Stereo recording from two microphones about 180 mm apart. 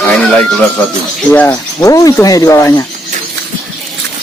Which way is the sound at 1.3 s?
10° left (ahead or behind).